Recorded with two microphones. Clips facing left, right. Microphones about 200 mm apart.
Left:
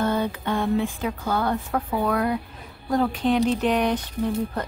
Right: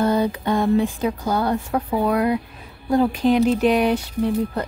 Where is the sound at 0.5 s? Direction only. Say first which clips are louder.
Right 5 dB; 40° right (ahead or behind).